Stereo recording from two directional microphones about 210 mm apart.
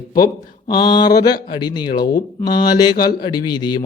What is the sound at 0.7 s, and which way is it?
Speech, 20° left (ahead or behind).